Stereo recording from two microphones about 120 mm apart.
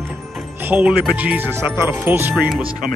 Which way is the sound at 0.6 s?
15° right (ahead or behind).